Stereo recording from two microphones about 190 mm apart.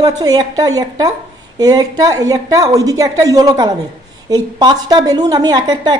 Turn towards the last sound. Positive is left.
turn(degrees=-20)  # may be behind; listen again after turning